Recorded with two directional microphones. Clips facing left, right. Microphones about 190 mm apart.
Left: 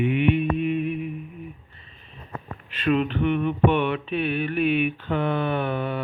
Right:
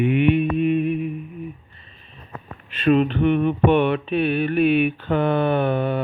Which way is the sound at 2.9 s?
35° right (ahead or behind).